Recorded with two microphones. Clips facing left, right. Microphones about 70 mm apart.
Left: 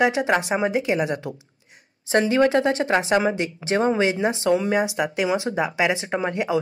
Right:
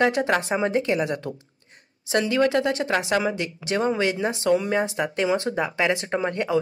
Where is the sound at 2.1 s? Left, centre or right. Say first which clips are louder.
Left 3 dB; left.